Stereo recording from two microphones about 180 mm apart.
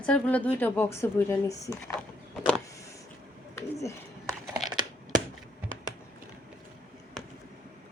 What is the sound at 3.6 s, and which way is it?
Bird, 15° left (ahead or behind).